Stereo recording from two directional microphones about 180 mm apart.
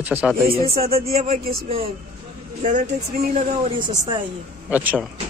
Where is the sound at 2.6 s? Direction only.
45° right (ahead or behind).